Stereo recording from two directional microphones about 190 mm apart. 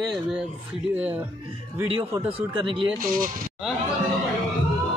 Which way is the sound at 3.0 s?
45° right (ahead or behind).